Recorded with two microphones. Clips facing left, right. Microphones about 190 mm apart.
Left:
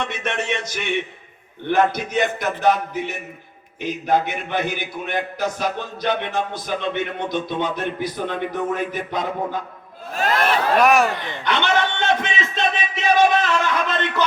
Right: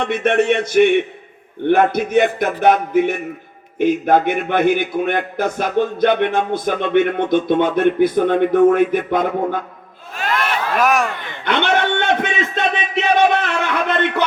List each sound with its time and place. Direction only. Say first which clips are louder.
0.0 s a man's voice: right 9 dB; 55° right (ahead or behind)
10.2 s crowd: left 1 dB; 35° left (ahead or behind)
10.8 s speech: even; centre (ahead or behind)
11.4 s music: right 3 dB; 55° right (ahead or behind)